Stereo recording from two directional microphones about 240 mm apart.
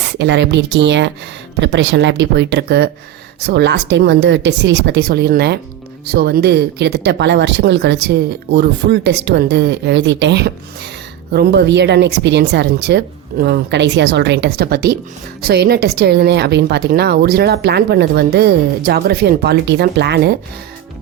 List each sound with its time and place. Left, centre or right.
0.2 s speech: right